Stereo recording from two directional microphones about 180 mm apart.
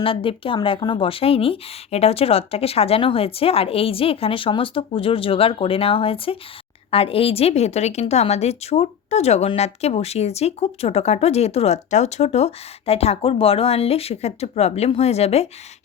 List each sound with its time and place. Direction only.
0.0 s a woman's voice: 30° left (ahead or behind)